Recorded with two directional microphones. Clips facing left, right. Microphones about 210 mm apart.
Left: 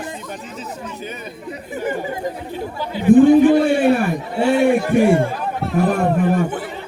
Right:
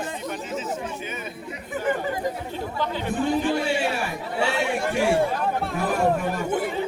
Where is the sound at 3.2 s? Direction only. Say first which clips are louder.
Left 13 dB; 55° left (ahead or behind).